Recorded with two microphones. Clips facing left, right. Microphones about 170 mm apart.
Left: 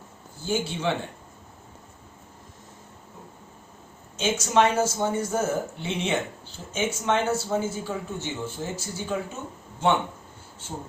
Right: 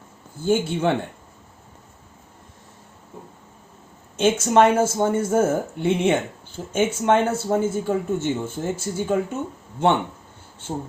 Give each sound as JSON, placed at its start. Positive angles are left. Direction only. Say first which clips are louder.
{"t": 0.4, "sound": "speech", "louder": "right 6 dB", "side_deg": -55}
{"t": 4.2, "sound": "speech", "louder": "right 5 dB", "side_deg": -55}